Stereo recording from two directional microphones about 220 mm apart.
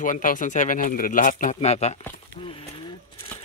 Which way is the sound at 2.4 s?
25° left (ahead or behind).